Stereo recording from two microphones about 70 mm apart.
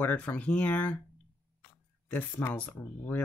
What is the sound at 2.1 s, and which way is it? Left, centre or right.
Speech, left.